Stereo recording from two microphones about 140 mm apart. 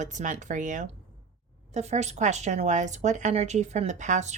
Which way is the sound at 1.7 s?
55° right (ahead or behind).